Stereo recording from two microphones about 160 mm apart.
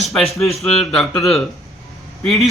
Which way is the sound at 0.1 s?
Centre (ahead or behind).